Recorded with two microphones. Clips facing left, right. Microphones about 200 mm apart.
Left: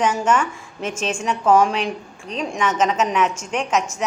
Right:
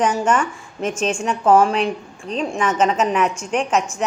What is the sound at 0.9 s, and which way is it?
Speech, 5° left (ahead or behind).